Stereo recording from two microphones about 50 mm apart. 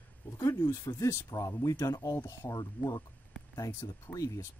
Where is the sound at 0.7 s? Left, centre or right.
Left.